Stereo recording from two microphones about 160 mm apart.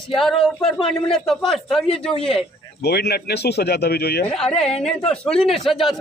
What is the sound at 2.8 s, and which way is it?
Speech, 90° left.